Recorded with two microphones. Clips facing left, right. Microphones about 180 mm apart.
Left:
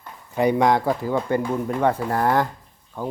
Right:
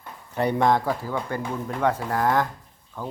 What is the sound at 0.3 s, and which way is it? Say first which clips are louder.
Speech: left 3 dB; 15° left (ahead or behind).